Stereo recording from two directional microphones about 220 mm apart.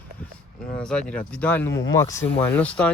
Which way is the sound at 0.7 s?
5° left (ahead or behind).